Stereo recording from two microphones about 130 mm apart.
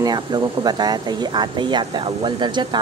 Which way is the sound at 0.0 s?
30° right (ahead or behind).